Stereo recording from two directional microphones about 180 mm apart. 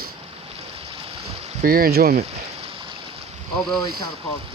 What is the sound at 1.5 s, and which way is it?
Speech, 45° right (ahead or behind).